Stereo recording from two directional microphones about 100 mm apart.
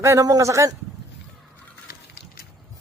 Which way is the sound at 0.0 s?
30° right (ahead or behind).